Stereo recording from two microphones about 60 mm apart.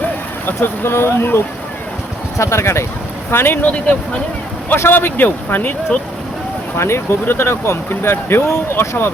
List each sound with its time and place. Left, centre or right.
0.4 s speech: left
2.4 s speech: left
3.3 s speech: left
3.7 s speech: left
4.7 s speech: left
6.7 s speech: left